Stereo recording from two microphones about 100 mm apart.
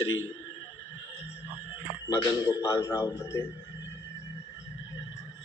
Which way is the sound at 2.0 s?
35° left (ahead or behind).